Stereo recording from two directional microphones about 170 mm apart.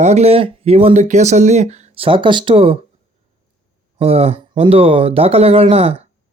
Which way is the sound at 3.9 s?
35° right (ahead or behind).